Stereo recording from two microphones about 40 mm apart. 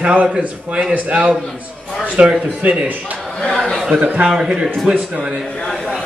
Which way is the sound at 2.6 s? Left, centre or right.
Right.